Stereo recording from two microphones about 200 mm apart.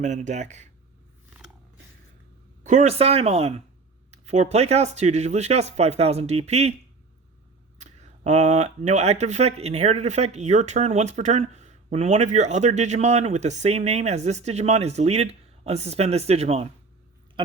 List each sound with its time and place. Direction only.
0.0 s speech: 35° right (ahead or behind)
2.6 s speech: 35° right (ahead or behind)
7.8 s speech: 35° right (ahead or behind)